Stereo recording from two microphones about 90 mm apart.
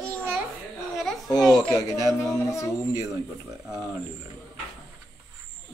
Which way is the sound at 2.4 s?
35° left (ahead or behind).